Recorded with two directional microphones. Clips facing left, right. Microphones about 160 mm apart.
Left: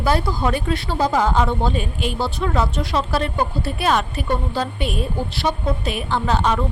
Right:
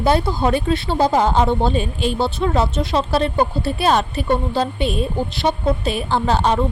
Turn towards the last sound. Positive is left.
turn(degrees=-30)  # may be behind; listen again after turning